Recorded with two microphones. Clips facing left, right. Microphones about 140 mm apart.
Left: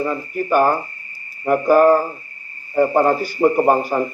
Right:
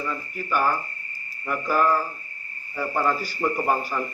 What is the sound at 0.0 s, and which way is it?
A man's voice, 45° left (ahead or behind).